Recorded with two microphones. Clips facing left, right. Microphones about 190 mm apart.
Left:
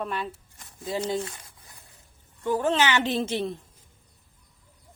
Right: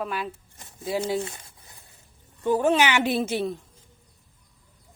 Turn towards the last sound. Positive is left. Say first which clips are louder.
# right 2 dB
turn(degrees=-5)  # may be behind; listen again after turning